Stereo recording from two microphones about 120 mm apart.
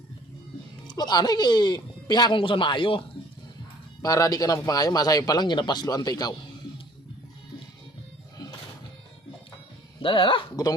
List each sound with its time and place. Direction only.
0.9 s speech: 35° left (ahead or behind)
4.0 s speech: 30° left (ahead or behind)
10.0 s dog: 45° left (ahead or behind)